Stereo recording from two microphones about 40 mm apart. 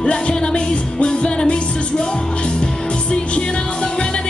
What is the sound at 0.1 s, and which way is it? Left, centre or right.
Music, left.